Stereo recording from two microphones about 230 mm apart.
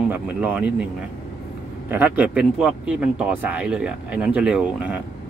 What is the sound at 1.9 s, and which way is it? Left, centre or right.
Speech, centre.